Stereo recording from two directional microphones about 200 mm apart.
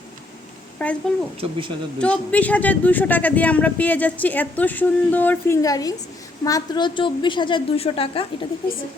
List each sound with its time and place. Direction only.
0.8 s speech: 5° left (ahead or behind)
1.4 s speech: 25° right (ahead or behind)
2.0 s a woman's voice: 5° left (ahead or behind); by 8.4 s 25° left (ahead or behind)